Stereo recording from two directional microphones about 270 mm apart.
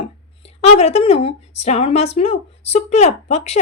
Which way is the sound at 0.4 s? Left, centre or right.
Left.